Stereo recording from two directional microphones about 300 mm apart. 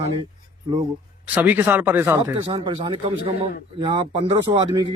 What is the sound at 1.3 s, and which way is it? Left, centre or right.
Speech, centre.